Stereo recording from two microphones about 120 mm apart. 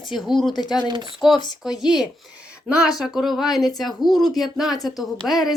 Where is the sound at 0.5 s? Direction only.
35° left (ahead or behind).